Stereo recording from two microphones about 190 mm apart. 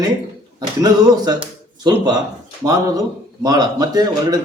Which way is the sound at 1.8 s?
20° right (ahead or behind).